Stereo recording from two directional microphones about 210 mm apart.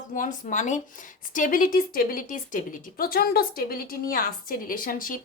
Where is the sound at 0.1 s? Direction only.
40° left (ahead or behind).